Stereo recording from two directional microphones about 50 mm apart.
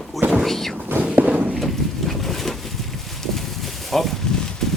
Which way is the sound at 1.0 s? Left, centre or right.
Right.